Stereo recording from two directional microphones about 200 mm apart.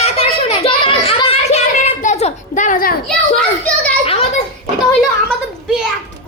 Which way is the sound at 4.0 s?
30° left (ahead or behind).